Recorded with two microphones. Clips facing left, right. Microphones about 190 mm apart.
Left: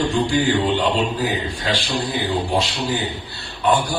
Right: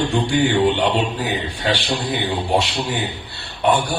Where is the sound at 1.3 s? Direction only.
65° right (ahead or behind).